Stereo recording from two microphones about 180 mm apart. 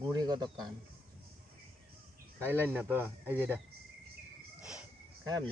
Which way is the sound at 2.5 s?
10° right (ahead or behind).